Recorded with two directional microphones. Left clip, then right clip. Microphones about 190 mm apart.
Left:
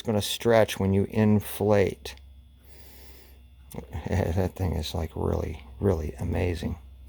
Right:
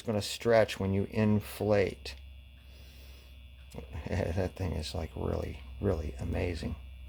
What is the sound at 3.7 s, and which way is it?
Speech, 45° left (ahead or behind).